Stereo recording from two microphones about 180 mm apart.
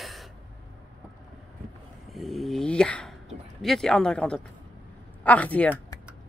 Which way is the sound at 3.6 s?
5° left (ahead or behind).